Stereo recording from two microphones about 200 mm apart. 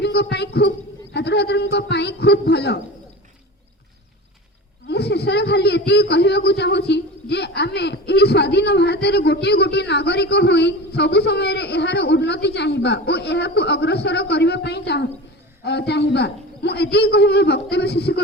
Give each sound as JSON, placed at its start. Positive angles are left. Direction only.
{"t": 0.0, "sound": "a man's voice", "side_deg": 55}
{"t": 4.9, "sound": "a man's voice", "side_deg": 55}